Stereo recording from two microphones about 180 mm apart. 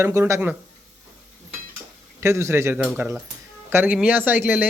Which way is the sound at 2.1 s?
15° right (ahead or behind).